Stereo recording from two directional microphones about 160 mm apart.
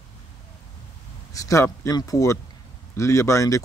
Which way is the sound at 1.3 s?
20° left (ahead or behind).